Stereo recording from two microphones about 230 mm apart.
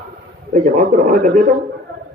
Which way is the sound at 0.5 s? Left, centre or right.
Right.